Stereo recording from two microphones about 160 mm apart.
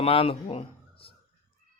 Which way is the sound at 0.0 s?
35° left (ahead or behind).